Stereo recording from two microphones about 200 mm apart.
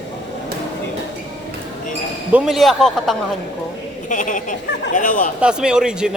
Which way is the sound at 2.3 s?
Centre (ahead or behind).